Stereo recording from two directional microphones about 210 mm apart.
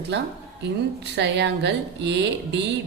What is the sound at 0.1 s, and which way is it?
A woman's voice, 55° right (ahead or behind).